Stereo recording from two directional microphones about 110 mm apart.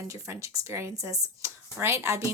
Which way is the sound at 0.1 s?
30° right (ahead or behind).